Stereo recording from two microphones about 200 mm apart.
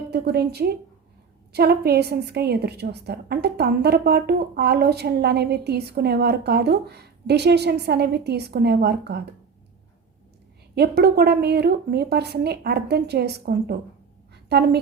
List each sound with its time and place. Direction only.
0.1 s a woman's voice: 55° right (ahead or behind)
10.8 s a woman's voice: 55° right (ahead or behind)